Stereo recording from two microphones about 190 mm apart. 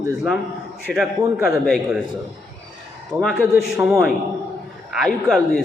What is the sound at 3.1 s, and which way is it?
Speech, 5° right (ahead or behind).